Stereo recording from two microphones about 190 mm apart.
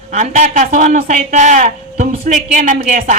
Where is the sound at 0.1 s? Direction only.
40° right (ahead or behind).